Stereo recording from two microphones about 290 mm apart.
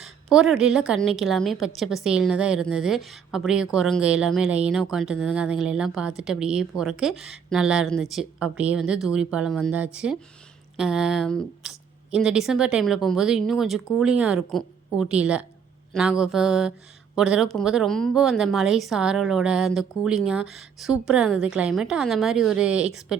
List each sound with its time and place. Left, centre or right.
0.0 s a woman's voice: centre